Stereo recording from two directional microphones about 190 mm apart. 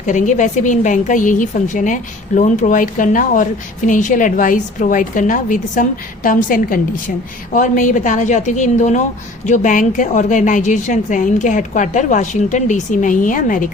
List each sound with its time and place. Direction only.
0.0 s a woman's voice: 40° left (ahead or behind)